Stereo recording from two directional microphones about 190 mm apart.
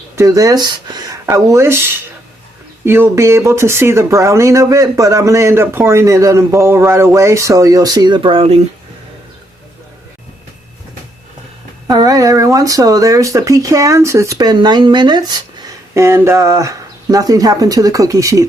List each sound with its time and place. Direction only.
0.2 s speech: 15° right (ahead or behind)
11.9 s speech: 20° right (ahead or behind)